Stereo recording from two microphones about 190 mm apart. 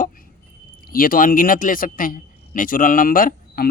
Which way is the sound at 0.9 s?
50° left (ahead or behind).